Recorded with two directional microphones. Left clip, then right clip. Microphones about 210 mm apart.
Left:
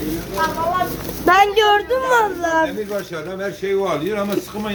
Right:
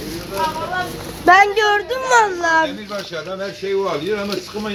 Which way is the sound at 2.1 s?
20° right (ahead or behind).